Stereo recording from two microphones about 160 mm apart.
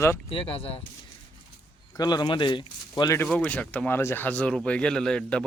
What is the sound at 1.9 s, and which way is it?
Speech, 25° left (ahead or behind).